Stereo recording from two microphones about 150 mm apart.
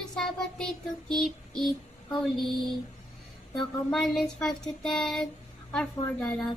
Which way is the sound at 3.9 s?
5° left (ahead or behind).